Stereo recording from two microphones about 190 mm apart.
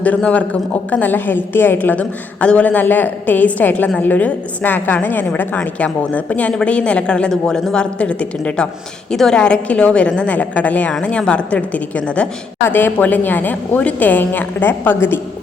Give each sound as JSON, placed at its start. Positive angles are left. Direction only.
{"t": 0.0, "sound": "a woman's voice", "side_deg": 5}